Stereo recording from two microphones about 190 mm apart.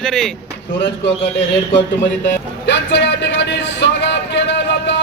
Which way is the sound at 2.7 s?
70° left (ahead or behind).